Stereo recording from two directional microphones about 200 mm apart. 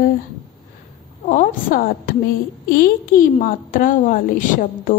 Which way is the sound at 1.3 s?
40° left (ahead or behind).